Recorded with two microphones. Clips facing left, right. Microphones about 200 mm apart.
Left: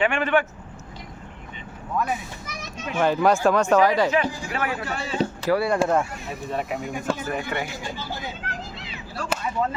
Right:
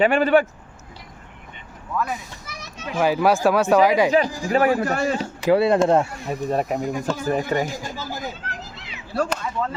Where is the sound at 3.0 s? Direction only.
5° right (ahead or behind).